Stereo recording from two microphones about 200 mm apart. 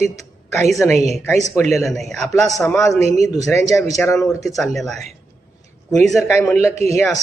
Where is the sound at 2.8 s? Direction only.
15° left (ahead or behind).